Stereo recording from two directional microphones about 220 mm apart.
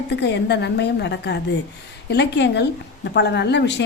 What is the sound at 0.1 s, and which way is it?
A woman's voice, 50° left (ahead or behind).